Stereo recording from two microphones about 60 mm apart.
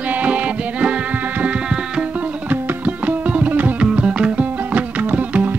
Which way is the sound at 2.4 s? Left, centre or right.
Right.